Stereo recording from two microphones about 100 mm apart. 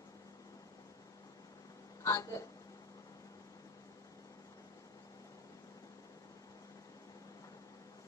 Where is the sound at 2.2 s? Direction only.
35° left (ahead or behind).